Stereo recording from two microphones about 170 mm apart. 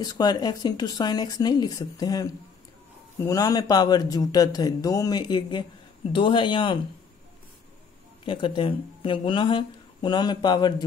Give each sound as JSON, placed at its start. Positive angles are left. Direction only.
{"t": 0.0, "sound": "speech", "side_deg": 25}
{"t": 8.3, "sound": "speech", "side_deg": 30}